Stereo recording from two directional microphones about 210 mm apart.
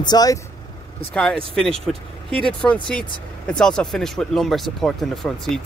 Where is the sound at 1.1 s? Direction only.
5° left (ahead or behind).